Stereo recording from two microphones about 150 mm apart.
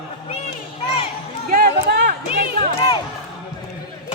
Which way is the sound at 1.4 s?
80° right.